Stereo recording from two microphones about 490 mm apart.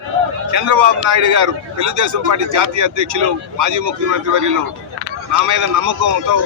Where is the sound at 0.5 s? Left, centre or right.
Right.